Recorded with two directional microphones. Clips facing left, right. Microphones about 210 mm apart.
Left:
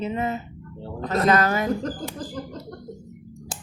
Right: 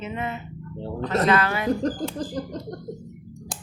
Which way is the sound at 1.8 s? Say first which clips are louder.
Right 4 dB; 35° right (ahead or behind).